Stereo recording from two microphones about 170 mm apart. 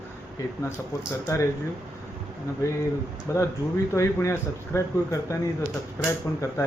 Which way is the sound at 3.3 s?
15° left (ahead or behind).